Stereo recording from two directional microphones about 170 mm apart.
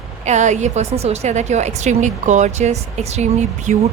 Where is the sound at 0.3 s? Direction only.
45° right (ahead or behind).